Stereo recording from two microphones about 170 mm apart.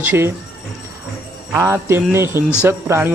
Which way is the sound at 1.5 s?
15° right (ahead or behind).